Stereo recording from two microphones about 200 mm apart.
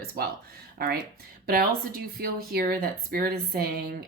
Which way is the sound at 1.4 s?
50° right (ahead or behind).